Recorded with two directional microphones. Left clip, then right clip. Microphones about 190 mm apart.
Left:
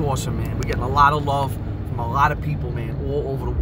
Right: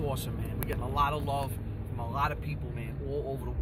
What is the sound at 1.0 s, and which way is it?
Speech, 15° left (ahead or behind).